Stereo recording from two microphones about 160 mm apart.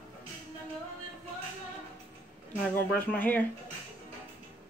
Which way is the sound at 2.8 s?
10° left (ahead or behind).